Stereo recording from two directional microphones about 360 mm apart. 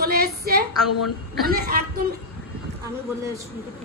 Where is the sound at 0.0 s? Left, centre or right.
Right.